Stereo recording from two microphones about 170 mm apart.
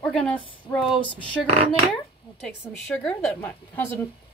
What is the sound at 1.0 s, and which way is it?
Speech, 30° left (ahead or behind).